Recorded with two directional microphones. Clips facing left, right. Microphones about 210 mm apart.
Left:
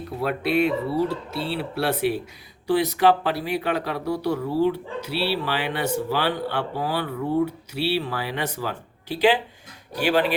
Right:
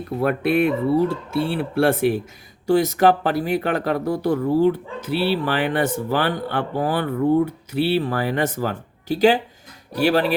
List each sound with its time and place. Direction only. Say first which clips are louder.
0.2 s speech: right 3 dB; 50° right (ahead or behind)